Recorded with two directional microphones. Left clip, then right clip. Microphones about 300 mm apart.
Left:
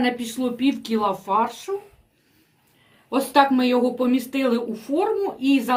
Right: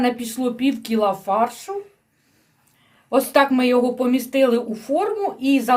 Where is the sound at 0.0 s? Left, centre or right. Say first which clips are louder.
Right 2 dB; right.